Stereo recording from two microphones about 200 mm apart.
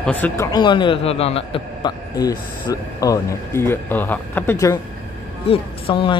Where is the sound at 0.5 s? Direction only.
20° left (ahead or behind).